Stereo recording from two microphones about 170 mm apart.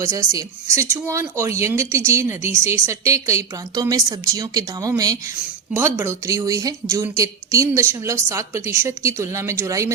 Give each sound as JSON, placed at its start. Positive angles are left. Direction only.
{"t": 0.0, "sound": "speech", "side_deg": -15}